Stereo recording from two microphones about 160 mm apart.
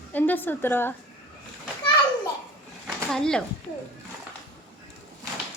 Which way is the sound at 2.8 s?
5° left (ahead or behind).